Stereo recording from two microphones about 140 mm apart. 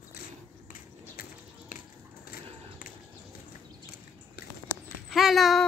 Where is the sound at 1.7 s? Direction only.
75° left (ahead or behind).